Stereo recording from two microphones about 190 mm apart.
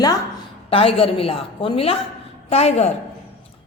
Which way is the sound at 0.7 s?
30° left (ahead or behind).